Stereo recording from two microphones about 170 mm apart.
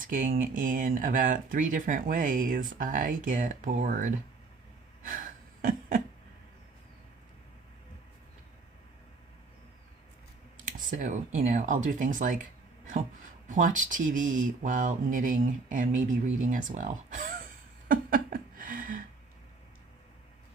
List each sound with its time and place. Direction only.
0.0 s speech: 50° right (ahead or behind)
10.7 s speech: 50° right (ahead or behind)
13.5 s speech: 50° right (ahead or behind)
17.8 s a sound: 55° right (ahead or behind)